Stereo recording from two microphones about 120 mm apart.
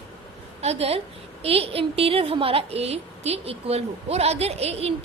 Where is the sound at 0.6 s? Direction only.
55° right (ahead or behind).